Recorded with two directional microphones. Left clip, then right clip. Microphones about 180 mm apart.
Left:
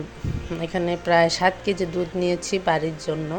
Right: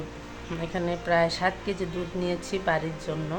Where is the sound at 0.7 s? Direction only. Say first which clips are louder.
Left 5 dB; 35° left (ahead or behind).